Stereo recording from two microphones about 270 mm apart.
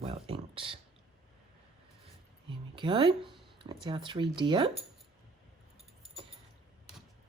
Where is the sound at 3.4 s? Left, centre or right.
Centre.